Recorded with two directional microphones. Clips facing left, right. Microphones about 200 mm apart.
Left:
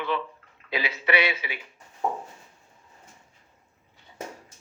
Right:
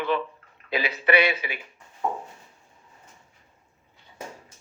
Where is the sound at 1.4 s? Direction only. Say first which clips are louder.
Right 2 dB; 45° right (ahead or behind).